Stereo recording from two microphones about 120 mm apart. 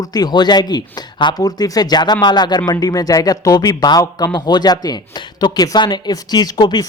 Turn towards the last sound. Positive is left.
turn(degrees=35)  # may be behind; listen again after turning